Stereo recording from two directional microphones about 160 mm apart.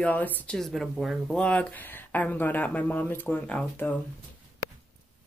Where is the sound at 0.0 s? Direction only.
10° left (ahead or behind).